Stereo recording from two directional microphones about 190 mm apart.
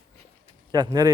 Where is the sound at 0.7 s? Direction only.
20° right (ahead or behind).